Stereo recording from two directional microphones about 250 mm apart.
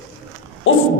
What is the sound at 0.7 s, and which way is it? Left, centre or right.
Hoot, left.